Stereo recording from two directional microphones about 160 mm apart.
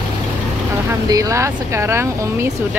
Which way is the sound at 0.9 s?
20° right (ahead or behind).